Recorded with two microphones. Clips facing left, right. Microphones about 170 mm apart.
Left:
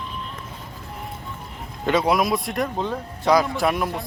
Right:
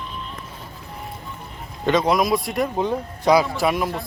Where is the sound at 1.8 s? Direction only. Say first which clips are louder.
Right 1 dB; 5° left (ahead or behind).